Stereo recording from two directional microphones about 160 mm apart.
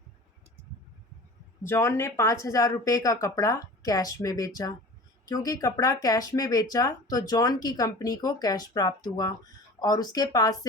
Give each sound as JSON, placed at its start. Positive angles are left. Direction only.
{"t": 1.6, "sound": "speech", "side_deg": 15}